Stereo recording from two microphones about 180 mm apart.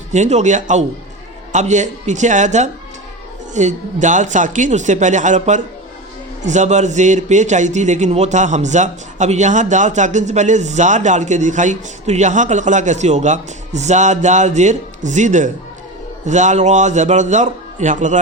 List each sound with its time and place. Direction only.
0.1 s a man's voice: 40° right (ahead or behind)